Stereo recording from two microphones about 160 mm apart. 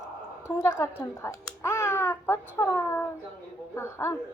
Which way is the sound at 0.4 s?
15° left (ahead or behind).